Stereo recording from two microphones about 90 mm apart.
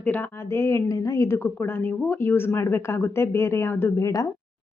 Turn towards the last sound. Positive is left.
turn(degrees=40)  # may be behind; listen again after turning